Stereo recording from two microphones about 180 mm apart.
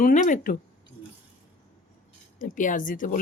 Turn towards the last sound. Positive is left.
turn(degrees=50)  # may be behind; listen again after turning